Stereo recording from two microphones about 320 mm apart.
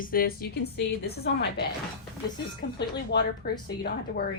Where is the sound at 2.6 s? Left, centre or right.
Left.